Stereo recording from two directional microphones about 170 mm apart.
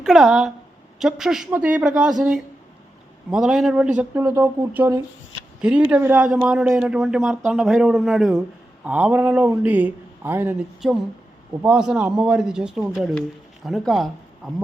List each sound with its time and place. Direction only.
0.0 s speech: centre (ahead or behind)
10.8 s speech: centre (ahead or behind)